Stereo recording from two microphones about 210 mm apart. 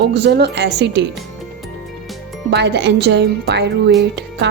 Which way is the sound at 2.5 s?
55° right (ahead or behind).